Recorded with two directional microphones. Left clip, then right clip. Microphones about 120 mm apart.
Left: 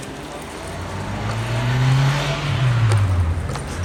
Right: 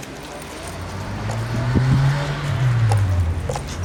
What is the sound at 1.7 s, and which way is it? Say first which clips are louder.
Vehicle: even; 45° left (ahead or behind).